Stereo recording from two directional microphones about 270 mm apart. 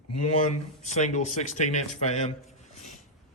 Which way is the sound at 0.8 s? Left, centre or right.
Left.